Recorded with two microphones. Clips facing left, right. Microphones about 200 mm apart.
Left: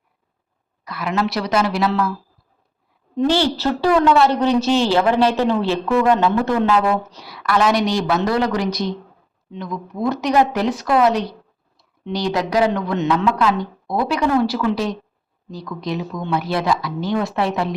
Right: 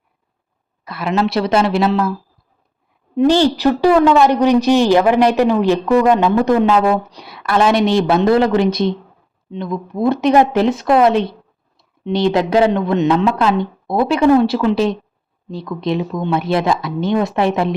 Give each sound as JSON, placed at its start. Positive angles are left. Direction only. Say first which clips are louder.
{"t": 0.9, "sound": "speech", "louder": "right 4 dB", "side_deg": -30}
{"t": 3.2, "sound": "a woman's voice", "louder": "right 5 dB", "side_deg": -15}